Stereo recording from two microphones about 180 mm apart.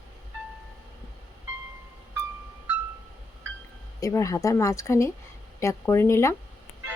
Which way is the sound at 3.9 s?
15° left (ahead or behind).